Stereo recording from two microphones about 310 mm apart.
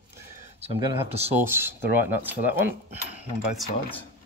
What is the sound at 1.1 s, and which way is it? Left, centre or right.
Speech, centre.